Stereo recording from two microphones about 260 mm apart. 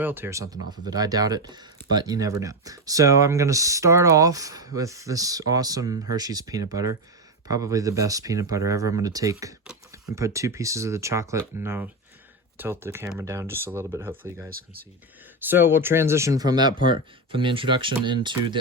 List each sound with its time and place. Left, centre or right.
0.0 s speech: centre
14.5 s speech: right
15.4 s speech: centre